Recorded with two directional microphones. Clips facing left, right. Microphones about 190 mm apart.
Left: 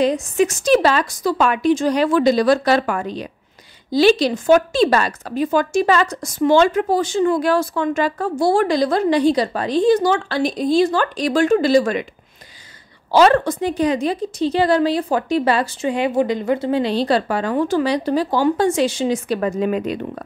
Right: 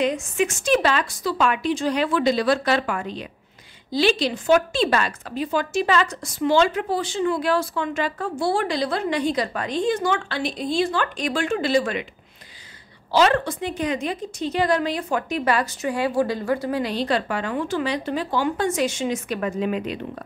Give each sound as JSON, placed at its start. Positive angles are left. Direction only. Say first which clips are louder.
{"t": 0.0, "sound": "a woman's voice", "louder": "left 5 dB", "side_deg": 35}
{"t": 13.1, "sound": "a woman's voice", "louder": "left 5 dB", "side_deg": 45}